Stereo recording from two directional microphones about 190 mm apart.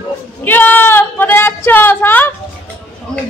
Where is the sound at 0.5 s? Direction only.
10° left (ahead or behind).